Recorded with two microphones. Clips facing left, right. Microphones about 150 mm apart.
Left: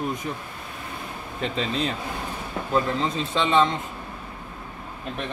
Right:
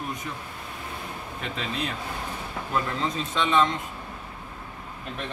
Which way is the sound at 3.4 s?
30° left (ahead or behind).